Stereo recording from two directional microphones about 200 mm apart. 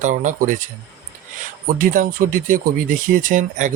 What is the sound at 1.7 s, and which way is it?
Speech, 40° right (ahead or behind).